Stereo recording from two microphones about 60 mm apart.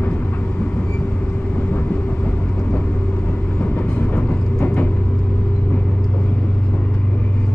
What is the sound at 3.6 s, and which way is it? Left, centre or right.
Vehicle, left.